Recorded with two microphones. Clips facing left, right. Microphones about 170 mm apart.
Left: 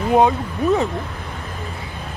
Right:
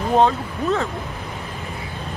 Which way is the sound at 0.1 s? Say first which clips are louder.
Left 2 dB; 15° left (ahead or behind).